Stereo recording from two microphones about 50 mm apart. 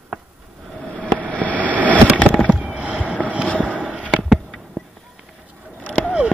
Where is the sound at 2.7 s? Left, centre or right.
Right.